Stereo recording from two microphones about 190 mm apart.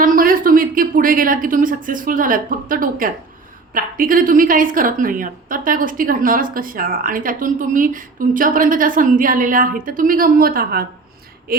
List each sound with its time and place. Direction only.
0.0 s a woman's voice: 45° right (ahead or behind)